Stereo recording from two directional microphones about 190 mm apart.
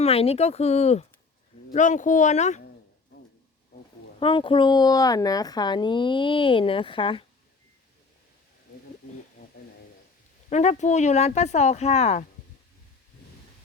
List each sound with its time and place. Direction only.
0.0 s speech: 30° left (ahead or behind)
4.2 s speech: 25° left (ahead or behind)
10.5 s speech: 35° left (ahead or behind)